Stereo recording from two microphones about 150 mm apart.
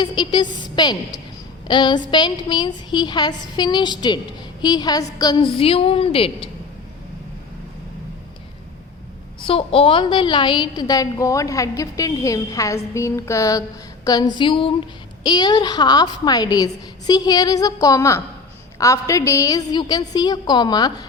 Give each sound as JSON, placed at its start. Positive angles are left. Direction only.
{"t": 0.0, "sound": "a woman's voice", "side_deg": 30}
{"t": 9.5, "sound": "a woman's voice", "side_deg": 40}